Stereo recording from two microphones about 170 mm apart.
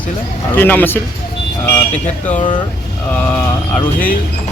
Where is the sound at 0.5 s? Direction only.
10° left (ahead or behind).